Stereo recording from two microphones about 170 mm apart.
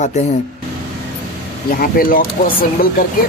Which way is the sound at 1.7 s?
60° left (ahead or behind).